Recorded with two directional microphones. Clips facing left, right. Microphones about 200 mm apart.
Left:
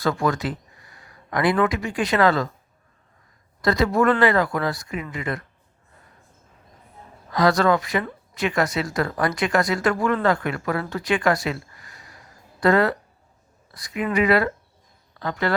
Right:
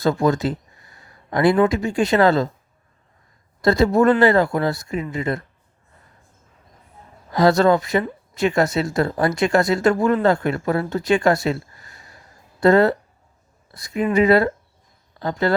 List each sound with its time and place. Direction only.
0.0 s speech: 25° right (ahead or behind)
3.6 s speech: 25° right (ahead or behind)
7.3 s speech: 25° right (ahead or behind)